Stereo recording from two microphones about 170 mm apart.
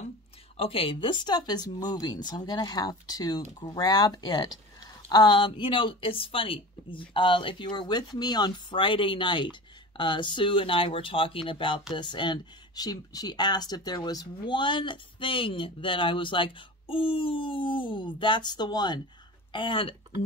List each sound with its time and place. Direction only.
0.6 s speech: 30° left (ahead or behind)